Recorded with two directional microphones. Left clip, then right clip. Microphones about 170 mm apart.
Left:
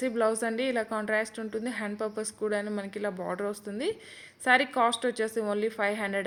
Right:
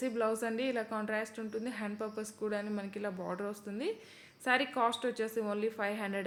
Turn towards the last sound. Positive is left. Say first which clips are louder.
# left 7 dB
turn(degrees=30)  # may be behind; listen again after turning